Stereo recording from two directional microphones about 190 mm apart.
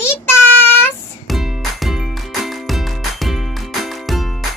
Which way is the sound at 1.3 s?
Centre (ahead or behind).